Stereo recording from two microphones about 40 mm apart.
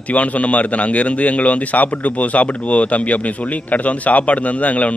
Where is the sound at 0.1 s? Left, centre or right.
Left.